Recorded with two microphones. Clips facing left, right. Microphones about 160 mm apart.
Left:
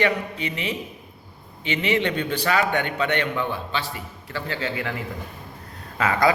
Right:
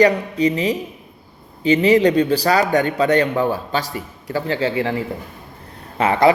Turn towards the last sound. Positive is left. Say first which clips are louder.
# right 6 dB
turn(degrees=-25)  # may be behind; listen again after turning